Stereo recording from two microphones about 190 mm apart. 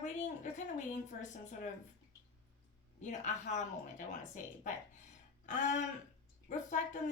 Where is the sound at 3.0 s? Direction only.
40° left (ahead or behind).